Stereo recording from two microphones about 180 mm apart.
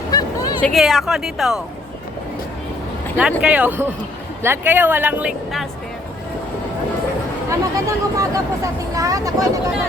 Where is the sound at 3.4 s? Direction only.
10° right (ahead or behind).